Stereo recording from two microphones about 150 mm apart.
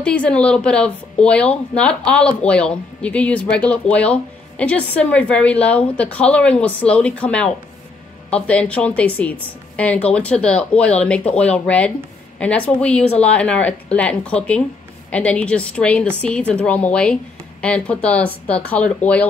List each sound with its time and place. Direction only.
0.0 s speech: 10° left (ahead or behind)